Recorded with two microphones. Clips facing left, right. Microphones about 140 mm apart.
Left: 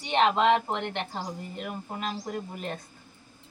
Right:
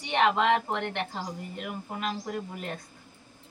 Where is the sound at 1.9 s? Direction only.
30° left (ahead or behind).